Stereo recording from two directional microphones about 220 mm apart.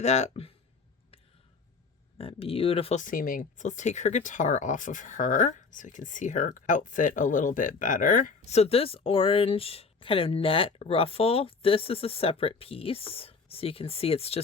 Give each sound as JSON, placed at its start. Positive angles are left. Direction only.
{"t": 0.0, "sound": "speech", "side_deg": 30}
{"t": 2.1, "sound": "speech", "side_deg": 25}